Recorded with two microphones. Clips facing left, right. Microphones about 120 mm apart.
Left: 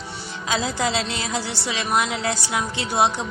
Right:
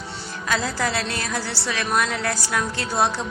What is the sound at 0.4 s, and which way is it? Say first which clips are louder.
A woman's voice: left 1 dB; 20° left (ahead or behind).